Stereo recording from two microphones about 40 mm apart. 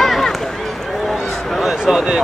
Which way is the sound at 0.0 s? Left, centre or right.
Centre.